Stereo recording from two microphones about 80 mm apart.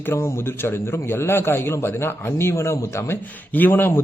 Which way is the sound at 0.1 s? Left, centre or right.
Left.